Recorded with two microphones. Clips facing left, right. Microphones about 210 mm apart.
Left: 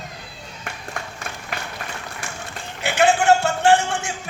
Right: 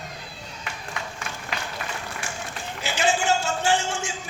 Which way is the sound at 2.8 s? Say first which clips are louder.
Left 6 dB; 60° left (ahead or behind).